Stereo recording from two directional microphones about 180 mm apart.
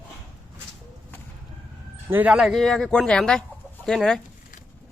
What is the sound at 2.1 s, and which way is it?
Speech, 10° right (ahead or behind).